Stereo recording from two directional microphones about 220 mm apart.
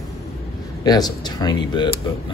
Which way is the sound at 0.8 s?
20° left (ahead or behind).